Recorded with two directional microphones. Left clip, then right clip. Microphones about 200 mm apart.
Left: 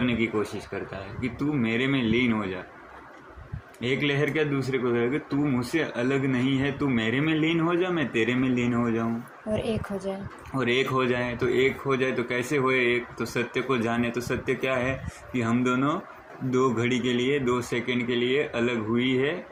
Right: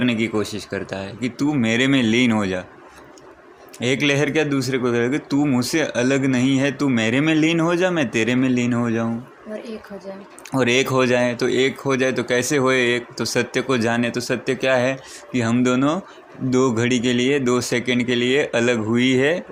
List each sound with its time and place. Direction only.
0.0 s speech: 60° right (ahead or behind)
3.8 s speech: 65° right (ahead or behind)
10.5 s speech: 65° right (ahead or behind)